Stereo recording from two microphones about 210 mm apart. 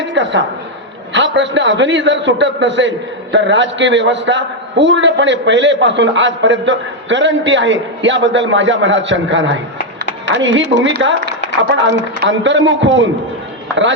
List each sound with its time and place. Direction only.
0.0 s a woman's voice: 60° right (ahead or behind)